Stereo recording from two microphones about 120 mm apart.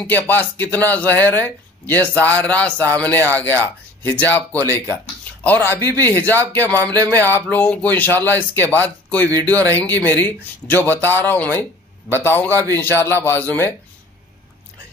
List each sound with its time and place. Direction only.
0.0 s a man's voice: 15° left (ahead or behind)